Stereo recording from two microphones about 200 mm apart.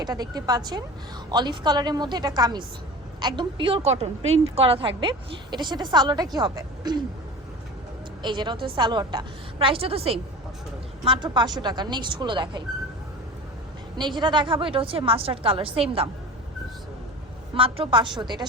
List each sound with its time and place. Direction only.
0.0 s a woman's voice: 20° right (ahead or behind)
8.2 s a woman's voice: 20° right (ahead or behind)
13.9 s a woman's voice: 20° right (ahead or behind)
17.5 s a woman's voice: 25° right (ahead or behind)